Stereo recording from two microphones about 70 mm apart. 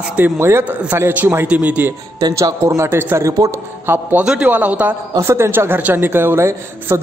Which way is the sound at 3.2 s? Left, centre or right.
Right.